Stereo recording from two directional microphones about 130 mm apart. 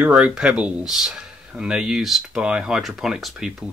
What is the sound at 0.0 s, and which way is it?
Speech, 10° right (ahead or behind).